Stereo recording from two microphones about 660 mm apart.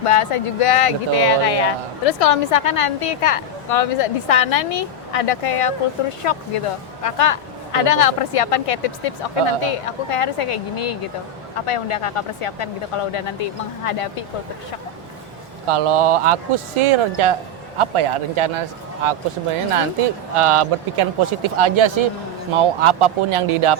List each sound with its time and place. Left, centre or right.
0.0 s speech: left
15.6 s speech: right
20.3 s speech: right